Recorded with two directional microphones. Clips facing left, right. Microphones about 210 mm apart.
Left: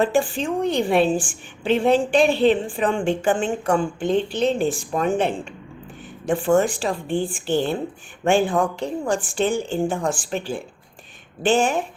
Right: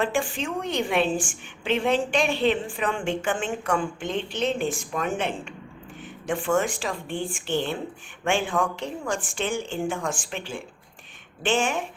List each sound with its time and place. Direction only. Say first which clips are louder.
0.0 s a woman's voice: left 6 dB; 35° left (ahead or behind)